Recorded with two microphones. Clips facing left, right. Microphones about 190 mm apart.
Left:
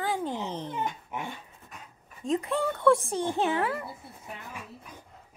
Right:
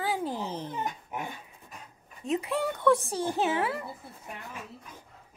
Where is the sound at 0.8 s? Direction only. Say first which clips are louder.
Left 1 dB; 45° right (ahead or behind).